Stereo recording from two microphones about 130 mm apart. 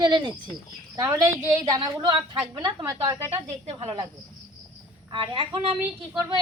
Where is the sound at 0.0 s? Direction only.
35° right (ahead or behind).